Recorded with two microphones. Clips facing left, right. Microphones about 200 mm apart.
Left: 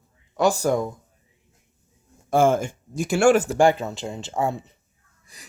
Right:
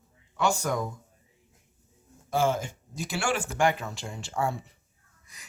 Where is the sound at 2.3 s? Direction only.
50° left (ahead or behind); by 4.7 s 20° left (ahead or behind).